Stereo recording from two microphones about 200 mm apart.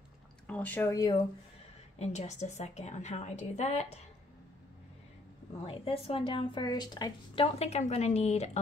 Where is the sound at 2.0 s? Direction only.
35° left (ahead or behind).